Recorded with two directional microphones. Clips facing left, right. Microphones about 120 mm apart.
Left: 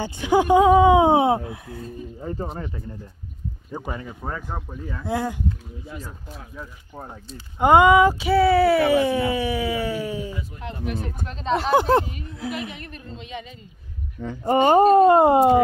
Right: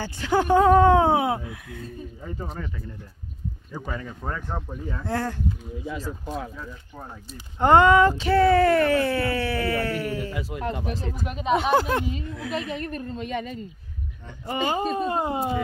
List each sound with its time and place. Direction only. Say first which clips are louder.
0.0 s speech: left 4 dB; 15° left (ahead or behind); by 2.7 s 35° left (ahead or behind)
3.7 s speech: left 2 dB; 20° left (ahead or behind)
5.9 s speech: right 8 dB; 90° right
7.5 s speech: left 2 dB; 10° left (ahead or behind)
10.5 s speech: right 7 dB; 90° right
11.2 s speech: right 3 dB; 10° right (ahead or behind)
12.5 s a woman's voice: right 4 dB; 35° right (ahead or behind)
14.4 s speech: left 10 dB; 45° left (ahead or behind); by 15.6 s 65° left (ahead or behind)